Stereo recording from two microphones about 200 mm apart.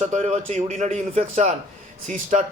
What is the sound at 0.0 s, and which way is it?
A man's voice, 35° right (ahead or behind).